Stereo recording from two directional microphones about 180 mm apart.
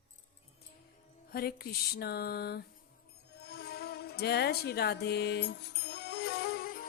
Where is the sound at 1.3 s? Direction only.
60° left (ahead or behind).